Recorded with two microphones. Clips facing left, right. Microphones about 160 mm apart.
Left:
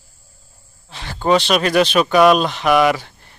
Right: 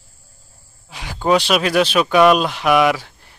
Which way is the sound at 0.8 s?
10° right (ahead or behind).